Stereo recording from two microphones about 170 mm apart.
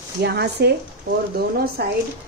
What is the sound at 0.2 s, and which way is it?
Speech, 75° right (ahead or behind).